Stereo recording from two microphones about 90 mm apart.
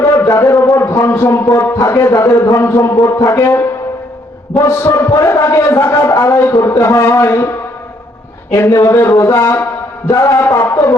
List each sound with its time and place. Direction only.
0.0 s a sound: 40° left (ahead or behind)
0.8 s a man's voice: 30° left (ahead or behind)
4.7 s a man's voice: 30° left (ahead or behind)
8.5 s a man's voice: 35° left (ahead or behind)